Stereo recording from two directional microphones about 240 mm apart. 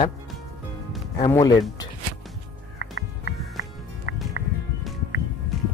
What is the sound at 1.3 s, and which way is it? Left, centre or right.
Speech, centre.